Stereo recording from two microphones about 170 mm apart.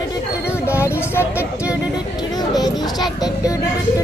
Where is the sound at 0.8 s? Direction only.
15° left (ahead or behind).